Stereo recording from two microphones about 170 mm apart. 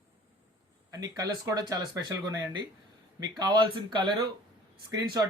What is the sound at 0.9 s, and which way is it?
Speech, 20° right (ahead or behind).